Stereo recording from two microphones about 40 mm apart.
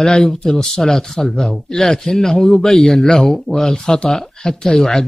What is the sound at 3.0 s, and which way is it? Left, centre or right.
Speech, left.